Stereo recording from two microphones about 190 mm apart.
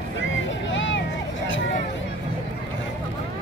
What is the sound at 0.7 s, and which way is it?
Vehicle, 75° left (ahead or behind).